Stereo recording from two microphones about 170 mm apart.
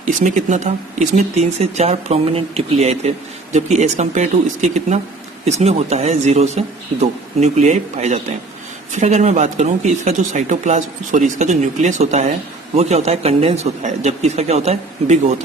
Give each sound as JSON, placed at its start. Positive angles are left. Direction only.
{"t": 0.1, "sound": "speech", "side_deg": -45}